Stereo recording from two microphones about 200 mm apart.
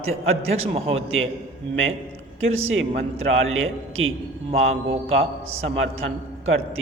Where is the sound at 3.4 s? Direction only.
80° right.